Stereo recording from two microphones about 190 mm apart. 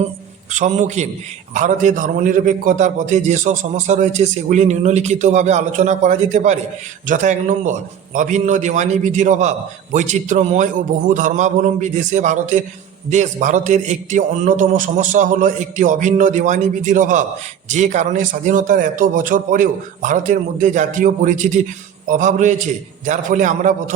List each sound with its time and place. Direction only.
0.5 s a man's voice: 40° right (ahead or behind)